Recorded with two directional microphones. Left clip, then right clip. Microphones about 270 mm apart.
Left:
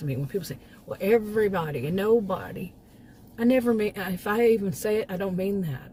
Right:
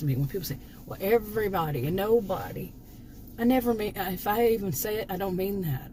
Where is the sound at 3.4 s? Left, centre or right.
Centre.